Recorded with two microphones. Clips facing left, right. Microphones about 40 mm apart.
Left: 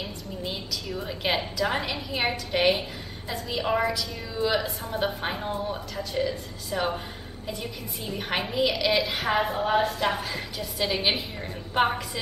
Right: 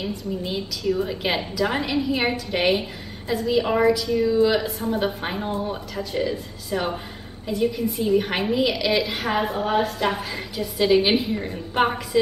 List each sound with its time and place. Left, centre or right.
0.0 s a woman's voice: centre